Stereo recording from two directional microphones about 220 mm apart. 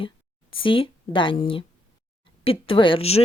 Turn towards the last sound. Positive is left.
turn(degrees=25)  # may be behind; listen again after turning